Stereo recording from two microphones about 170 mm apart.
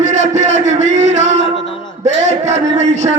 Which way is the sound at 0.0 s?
45° right (ahead or behind).